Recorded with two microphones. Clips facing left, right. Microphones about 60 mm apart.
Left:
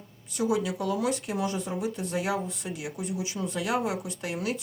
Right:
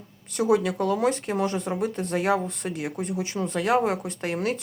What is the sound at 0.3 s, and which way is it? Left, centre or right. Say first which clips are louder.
Speech: right 5 dB; right.